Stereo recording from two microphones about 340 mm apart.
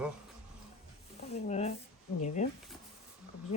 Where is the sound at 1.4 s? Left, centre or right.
Centre.